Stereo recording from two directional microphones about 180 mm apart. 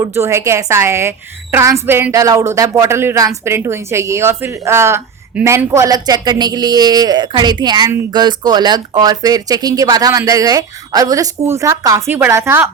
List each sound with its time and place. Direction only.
0.0 s a woman's voice: 15° right (ahead or behind)